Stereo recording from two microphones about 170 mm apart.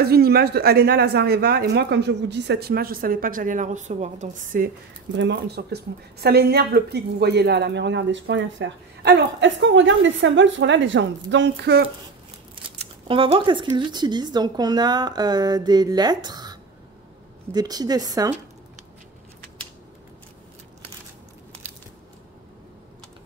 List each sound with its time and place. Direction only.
0.0 s speech: 65° right (ahead or behind); by 4.6 s 50° right (ahead or behind)
5.1 s speech: 90° right; by 11.9 s 75° right (ahead or behind)
12.7 s a sound: 30° right (ahead or behind)
13.7 s speech: 25° right (ahead or behind)